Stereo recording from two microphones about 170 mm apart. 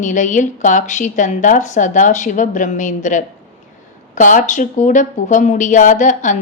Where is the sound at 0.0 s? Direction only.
45° left (ahead or behind).